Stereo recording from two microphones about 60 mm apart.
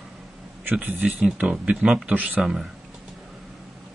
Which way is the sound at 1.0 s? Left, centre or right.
Centre.